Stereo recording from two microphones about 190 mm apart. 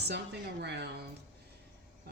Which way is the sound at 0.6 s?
60° right (ahead or behind).